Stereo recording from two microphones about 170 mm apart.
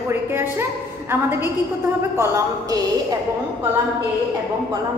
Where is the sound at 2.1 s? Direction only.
15° right (ahead or behind).